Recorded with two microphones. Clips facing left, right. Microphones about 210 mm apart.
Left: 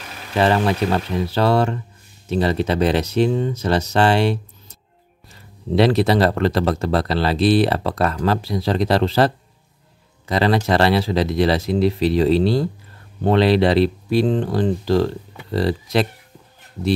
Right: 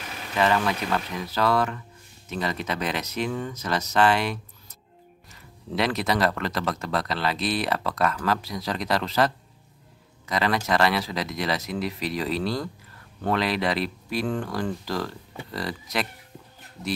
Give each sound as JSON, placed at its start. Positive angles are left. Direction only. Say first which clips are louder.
{"t": 0.4, "sound": "speech", "louder": "left 6 dB", "side_deg": 35}